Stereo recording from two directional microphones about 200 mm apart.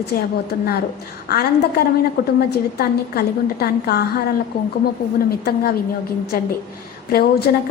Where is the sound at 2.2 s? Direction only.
50° left (ahead or behind).